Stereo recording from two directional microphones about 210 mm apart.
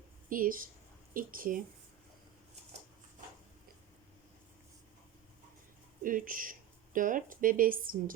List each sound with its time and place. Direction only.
0.3 s speech: 40° right (ahead or behind)
6.0 s speech: 40° right (ahead or behind)